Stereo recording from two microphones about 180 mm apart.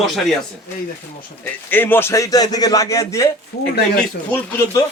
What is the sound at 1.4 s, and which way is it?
A man's voice, 10° left (ahead or behind).